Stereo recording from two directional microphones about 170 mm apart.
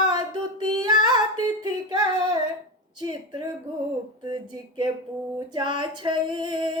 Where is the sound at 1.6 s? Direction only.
25° right (ahead or behind).